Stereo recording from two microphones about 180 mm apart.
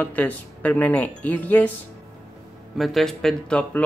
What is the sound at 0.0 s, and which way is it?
Speech, 10° left (ahead or behind).